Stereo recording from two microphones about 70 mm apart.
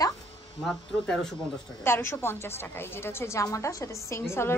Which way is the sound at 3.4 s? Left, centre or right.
Left.